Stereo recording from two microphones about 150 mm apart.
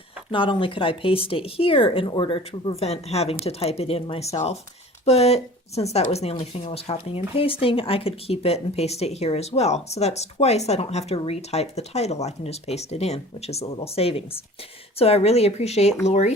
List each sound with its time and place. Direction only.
0.3 s speech: 35° left (ahead or behind)